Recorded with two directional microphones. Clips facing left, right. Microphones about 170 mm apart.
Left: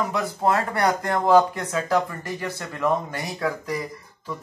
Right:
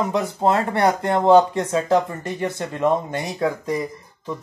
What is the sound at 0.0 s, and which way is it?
Speech, 25° right (ahead or behind).